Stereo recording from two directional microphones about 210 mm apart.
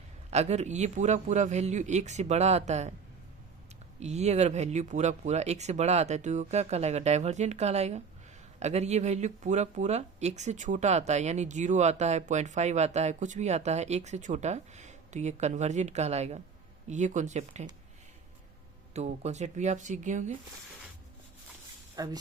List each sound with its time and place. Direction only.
0.3 s speech: 30° right (ahead or behind)
4.0 s speech: 30° right (ahead or behind)
18.9 s speech: 30° right (ahead or behind)
21.9 s speech: 15° right (ahead or behind)